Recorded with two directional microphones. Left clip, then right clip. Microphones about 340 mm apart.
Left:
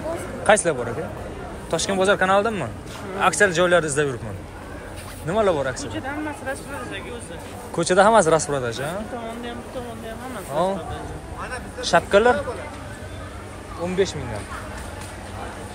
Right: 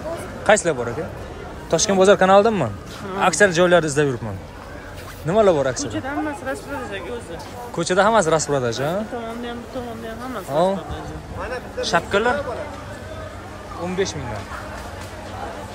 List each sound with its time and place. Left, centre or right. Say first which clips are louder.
0.5 s a man's voice: right 1 dB; centre
5.3 s a man's voice: right 4 dB; centre
6.0 s speech: right 2 dB; right
7.7 s a man's voice: left 1 dB; centre
10.5 s a man's voice: right 4 dB; centre
11.8 s speech: left 3 dB; centre
13.8 s a man's voice: left 1 dB; centre